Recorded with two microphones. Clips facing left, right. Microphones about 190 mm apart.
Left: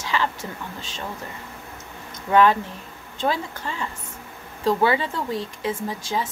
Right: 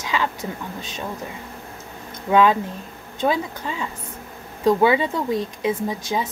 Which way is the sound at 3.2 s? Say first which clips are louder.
Right 3 dB; 15° right (ahead or behind).